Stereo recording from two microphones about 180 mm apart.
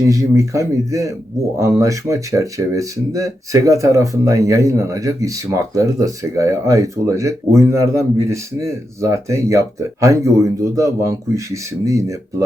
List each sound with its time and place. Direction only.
0.0 s speech: 15° right (ahead or behind)